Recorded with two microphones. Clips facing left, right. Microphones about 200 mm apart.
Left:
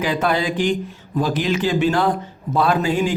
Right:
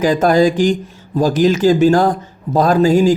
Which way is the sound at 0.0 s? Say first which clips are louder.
Right 8 dB; 45° right (ahead or behind).